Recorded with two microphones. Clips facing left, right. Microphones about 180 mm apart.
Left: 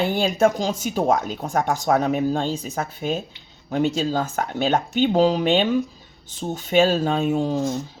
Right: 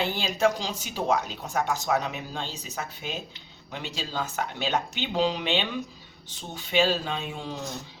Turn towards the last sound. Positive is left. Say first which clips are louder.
# left 13 dB
turn(degrees=45)  # may be behind; listen again after turning